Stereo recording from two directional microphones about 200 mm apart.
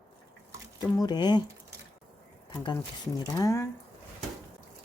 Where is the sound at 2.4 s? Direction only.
20° left (ahead or behind).